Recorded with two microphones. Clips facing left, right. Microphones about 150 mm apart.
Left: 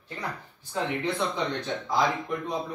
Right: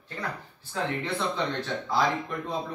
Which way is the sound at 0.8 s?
15° left (ahead or behind).